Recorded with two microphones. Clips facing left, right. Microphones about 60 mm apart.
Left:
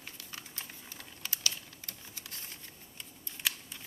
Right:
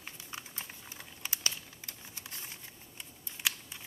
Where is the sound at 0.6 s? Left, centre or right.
Centre.